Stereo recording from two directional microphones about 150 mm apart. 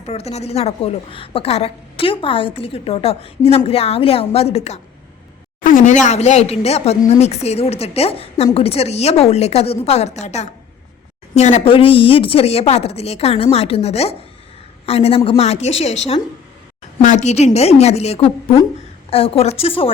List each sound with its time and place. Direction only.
0.0 s a woman's voice: 45° left (ahead or behind)
5.6 s a woman's voice: 60° left (ahead or behind); by 19.9 s 40° left (ahead or behind)